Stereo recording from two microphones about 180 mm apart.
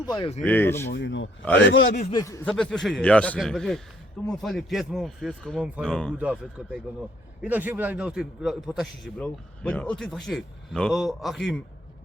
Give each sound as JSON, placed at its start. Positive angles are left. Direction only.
{"t": 0.0, "sound": "speech", "side_deg": 20}
{"t": 0.4, "sound": "speech", "side_deg": 10}
{"t": 0.9, "sound": "a man's voice", "side_deg": 85}
{"t": 2.1, "sound": "speech", "side_deg": 15}
{"t": 2.5, "sound": "a man's voice", "side_deg": 5}